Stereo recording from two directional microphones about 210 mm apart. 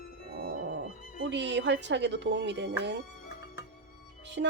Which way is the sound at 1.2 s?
55° right (ahead or behind).